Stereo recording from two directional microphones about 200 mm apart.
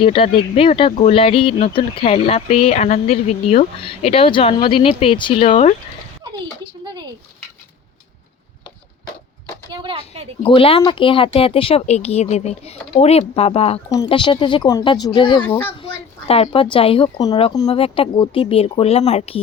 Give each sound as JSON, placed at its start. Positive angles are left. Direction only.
{"t": 0.0, "sound": "speech", "side_deg": 25}
{"t": 6.8, "sound": "a sound", "side_deg": -25}
{"t": 9.7, "sound": "a sound", "side_deg": -25}
{"t": 10.4, "sound": "speech", "side_deg": 25}
{"t": 15.4, "sound": "a child's voice", "side_deg": 10}
{"t": 15.8, "sound": "a woman's voice", "side_deg": 30}